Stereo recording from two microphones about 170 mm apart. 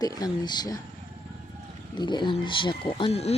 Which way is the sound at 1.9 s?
25° left (ahead or behind).